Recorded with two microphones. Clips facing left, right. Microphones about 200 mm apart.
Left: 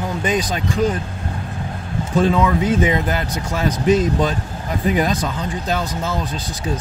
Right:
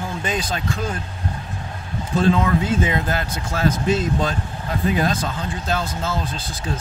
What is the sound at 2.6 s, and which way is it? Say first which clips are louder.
Speech: left 4 dB; 15° left (ahead or behind).